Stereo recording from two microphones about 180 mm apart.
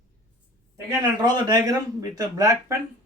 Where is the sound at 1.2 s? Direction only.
20° right (ahead or behind).